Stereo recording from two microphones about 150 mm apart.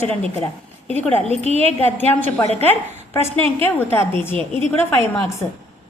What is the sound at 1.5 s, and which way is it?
A woman's voice, 45° right (ahead or behind).